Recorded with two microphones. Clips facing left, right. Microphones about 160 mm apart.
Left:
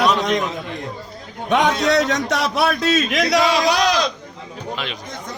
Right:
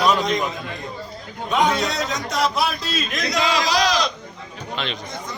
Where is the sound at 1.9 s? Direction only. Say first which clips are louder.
Left 8 dB; 80° left.